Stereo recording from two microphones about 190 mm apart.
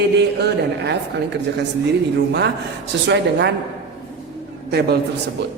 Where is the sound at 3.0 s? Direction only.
65° right (ahead or behind).